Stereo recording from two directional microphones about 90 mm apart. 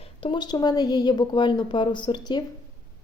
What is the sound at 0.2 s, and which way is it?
Speech, 75° left (ahead or behind).